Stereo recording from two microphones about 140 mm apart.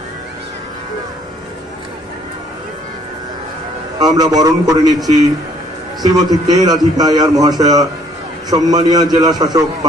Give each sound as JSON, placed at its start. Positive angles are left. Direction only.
{"t": 4.0, "sound": "a man's voice", "side_deg": -25}